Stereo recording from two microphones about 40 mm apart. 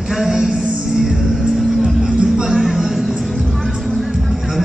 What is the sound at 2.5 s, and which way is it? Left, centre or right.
Music, centre.